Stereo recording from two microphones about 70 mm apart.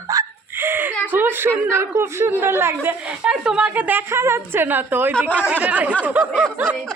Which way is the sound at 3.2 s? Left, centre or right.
Centre.